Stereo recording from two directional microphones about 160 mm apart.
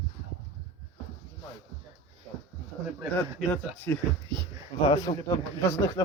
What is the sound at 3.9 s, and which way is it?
Speech, 15° left (ahead or behind).